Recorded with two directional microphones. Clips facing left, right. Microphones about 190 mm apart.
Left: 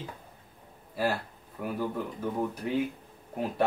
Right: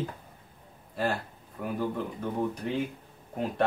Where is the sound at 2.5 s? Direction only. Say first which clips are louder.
Left 1 dB; 5° left (ahead or behind).